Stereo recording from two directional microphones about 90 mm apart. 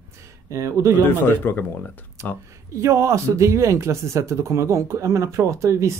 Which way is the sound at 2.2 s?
35° right (ahead or behind).